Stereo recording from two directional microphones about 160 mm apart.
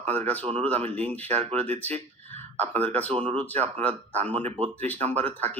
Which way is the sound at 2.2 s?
10° left (ahead or behind).